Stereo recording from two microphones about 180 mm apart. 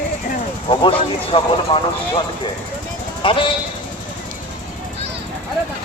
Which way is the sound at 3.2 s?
30° left (ahead or behind).